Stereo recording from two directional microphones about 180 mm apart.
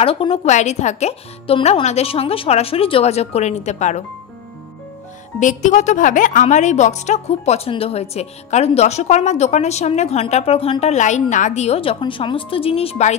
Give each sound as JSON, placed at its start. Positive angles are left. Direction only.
{"t": 0.0, "sound": "a woman's voice", "side_deg": 30}
{"t": 5.4, "sound": "a woman's voice", "side_deg": 45}